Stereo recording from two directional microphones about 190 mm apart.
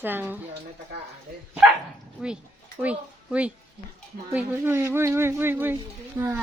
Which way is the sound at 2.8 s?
5° right (ahead or behind).